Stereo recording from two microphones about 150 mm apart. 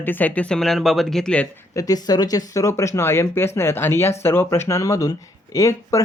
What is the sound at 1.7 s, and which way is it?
Speech, 25° left (ahead or behind).